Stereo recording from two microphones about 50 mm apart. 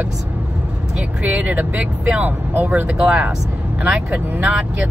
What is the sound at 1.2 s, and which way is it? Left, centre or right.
Speech, right.